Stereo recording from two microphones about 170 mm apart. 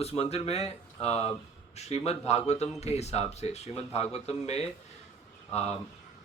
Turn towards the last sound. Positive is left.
turn(degrees=40)  # may be behind; listen again after turning